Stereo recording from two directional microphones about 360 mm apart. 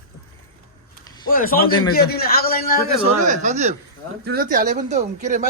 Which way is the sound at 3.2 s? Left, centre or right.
Centre.